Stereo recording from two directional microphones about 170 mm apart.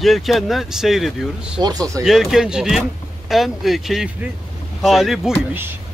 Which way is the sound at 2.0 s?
Centre (ahead or behind).